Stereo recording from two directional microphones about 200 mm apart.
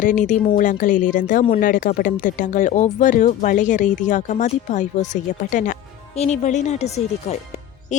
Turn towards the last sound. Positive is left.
turn(degrees=35)  # may be behind; listen again after turning